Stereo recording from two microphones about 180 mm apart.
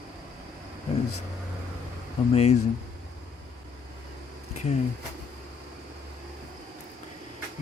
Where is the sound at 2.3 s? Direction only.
35° left (ahead or behind).